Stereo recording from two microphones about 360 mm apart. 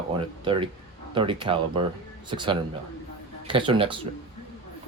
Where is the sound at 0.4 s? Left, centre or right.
Centre.